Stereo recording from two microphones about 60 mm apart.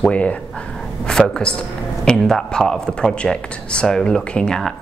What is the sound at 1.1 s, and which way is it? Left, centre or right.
A woman's voice, centre.